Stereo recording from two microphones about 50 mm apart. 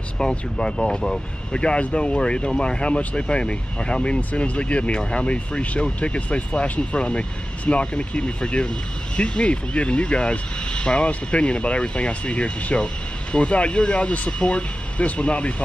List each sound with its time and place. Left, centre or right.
0.2 s speech: centre